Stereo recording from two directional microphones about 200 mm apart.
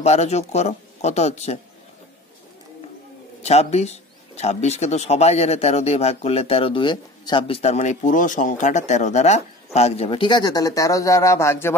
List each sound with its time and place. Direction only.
0.0 s speech: 35° left (ahead or behind)
3.4 s speech: 35° left (ahead or behind); by 11.7 s 15° left (ahead or behind)